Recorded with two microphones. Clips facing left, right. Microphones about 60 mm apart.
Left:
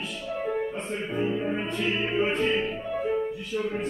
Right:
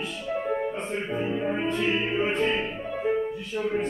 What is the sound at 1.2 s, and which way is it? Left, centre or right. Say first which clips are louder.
Music: left 1 dB; centre.